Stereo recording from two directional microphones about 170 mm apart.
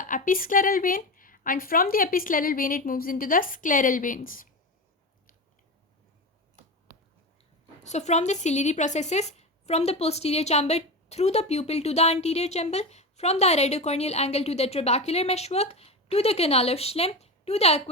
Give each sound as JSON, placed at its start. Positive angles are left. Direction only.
{"t": 0.0, "sound": "speech", "side_deg": 55}
{"t": 7.9, "sound": "a woman's voice", "side_deg": 40}